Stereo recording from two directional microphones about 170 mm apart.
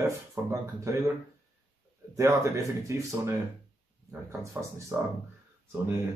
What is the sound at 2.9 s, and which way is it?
Speech, 20° right (ahead or behind).